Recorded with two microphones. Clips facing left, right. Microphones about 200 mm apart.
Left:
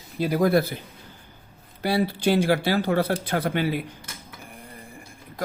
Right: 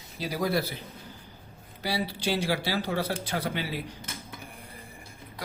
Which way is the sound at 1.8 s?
55° left (ahead or behind).